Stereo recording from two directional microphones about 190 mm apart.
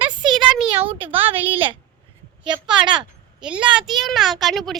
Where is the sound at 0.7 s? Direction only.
25° right (ahead or behind).